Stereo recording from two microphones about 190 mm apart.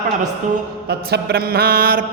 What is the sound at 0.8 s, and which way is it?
Music, 55° right (ahead or behind).